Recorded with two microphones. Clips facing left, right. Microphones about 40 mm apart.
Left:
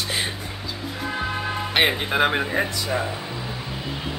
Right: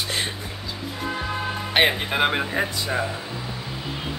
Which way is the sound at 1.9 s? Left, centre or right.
Centre.